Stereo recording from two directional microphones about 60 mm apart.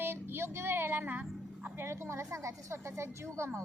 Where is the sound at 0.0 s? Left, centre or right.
Right.